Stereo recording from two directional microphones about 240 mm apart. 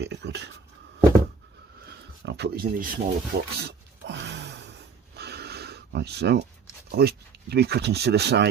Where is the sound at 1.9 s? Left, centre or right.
Right.